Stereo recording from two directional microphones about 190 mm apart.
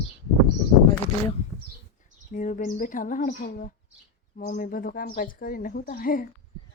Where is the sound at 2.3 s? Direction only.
45° left (ahead or behind).